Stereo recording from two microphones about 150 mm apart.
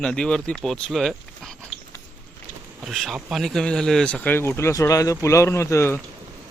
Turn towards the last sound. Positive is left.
turn(degrees=20)  # may be behind; listen again after turning